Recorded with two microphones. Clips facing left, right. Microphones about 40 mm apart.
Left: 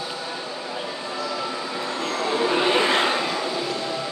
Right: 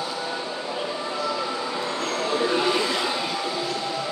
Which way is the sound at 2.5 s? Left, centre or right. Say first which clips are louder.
Left 2 dB; left.